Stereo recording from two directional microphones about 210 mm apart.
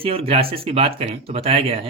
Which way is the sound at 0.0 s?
25° right (ahead or behind).